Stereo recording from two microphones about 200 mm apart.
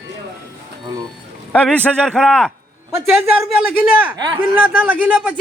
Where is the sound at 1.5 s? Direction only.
5° left (ahead or behind).